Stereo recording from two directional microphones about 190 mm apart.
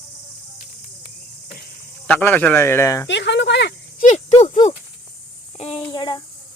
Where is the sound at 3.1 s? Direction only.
70° left (ahead or behind).